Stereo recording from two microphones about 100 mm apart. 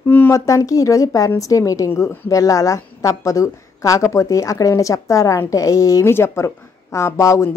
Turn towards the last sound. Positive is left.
turn(degrees=30)  # may be behind; listen again after turning